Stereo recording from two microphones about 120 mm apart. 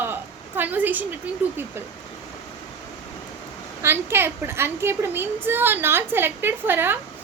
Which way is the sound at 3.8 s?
20° right (ahead or behind).